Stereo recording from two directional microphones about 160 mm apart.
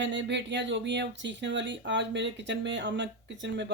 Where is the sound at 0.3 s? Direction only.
90° right.